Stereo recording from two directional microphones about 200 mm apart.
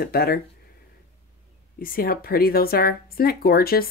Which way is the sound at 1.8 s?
45° left (ahead or behind).